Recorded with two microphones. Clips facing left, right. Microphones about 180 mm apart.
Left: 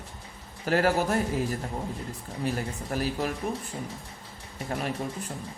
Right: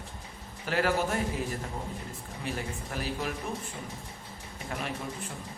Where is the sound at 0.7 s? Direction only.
40° left (ahead or behind).